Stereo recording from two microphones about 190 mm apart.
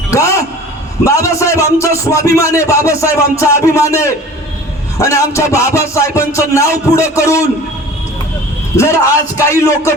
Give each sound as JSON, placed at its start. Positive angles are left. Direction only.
{"t": 0.1, "sound": "a sound", "side_deg": 15}
{"t": 1.0, "sound": "speech", "side_deg": 15}
{"t": 8.7, "sound": "speech", "side_deg": 15}